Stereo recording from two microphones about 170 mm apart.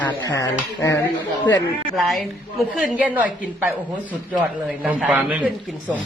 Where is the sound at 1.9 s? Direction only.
Centre (ahead or behind).